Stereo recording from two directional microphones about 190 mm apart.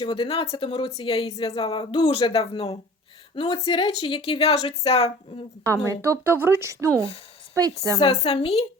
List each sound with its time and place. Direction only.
0.0 s a woman's voice: 30° left (ahead or behind)
6.1 s speech: 10° right (ahead or behind)
8.0 s a woman's voice: 30° left (ahead or behind)